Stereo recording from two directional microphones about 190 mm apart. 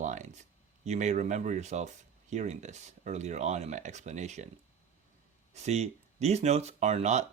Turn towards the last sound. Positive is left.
turn(degrees=-35)  # may be behind; listen again after turning